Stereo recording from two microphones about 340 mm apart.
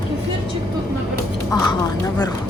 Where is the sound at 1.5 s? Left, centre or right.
Centre.